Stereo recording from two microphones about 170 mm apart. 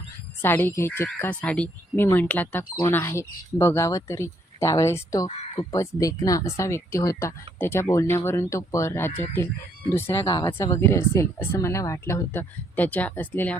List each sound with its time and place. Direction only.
0.4 s speech: 10° left (ahead or behind)
10.2 s speech: 25° left (ahead or behind)
10.6 s speech: 15° left (ahead or behind)